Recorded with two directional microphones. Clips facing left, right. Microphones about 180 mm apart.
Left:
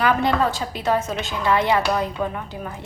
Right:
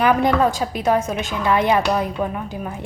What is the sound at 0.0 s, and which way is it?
A woman's voice, 15° right (ahead or behind).